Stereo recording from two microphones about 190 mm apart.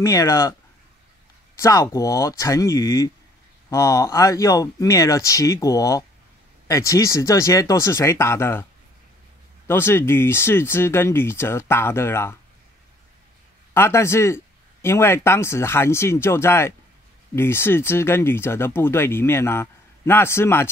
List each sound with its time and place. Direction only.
0.0 s speech: 15° left (ahead or behind)
1.6 s speech: 15° left (ahead or behind)
9.7 s speech: 10° left (ahead or behind)
13.7 s speech: 15° left (ahead or behind)